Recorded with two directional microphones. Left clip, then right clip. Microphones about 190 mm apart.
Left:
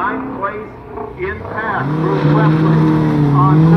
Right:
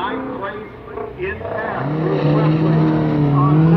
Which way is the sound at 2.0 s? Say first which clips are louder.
Left 2 dB; 5° right (ahead or behind).